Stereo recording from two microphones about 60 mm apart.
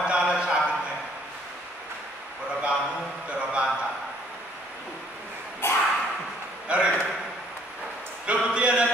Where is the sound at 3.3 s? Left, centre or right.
Centre.